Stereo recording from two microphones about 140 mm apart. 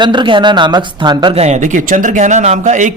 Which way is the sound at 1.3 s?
50° right (ahead or behind).